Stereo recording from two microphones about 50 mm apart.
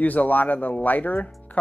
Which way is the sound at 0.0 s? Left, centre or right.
Left.